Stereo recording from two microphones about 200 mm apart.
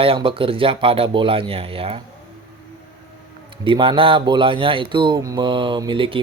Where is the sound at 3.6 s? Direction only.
25° right (ahead or behind).